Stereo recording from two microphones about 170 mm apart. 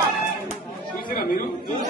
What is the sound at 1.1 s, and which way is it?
Chatter, 55° left (ahead or behind).